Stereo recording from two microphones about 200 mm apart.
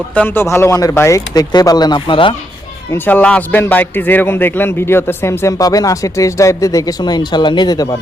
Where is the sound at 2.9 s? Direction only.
10° left (ahead or behind).